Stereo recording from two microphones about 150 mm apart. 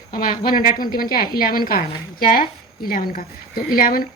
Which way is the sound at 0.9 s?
80° left.